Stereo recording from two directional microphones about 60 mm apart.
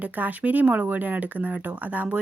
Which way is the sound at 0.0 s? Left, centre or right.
Right.